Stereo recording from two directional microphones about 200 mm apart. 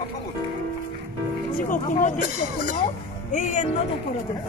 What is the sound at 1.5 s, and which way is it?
Speech, 40° left (ahead or behind).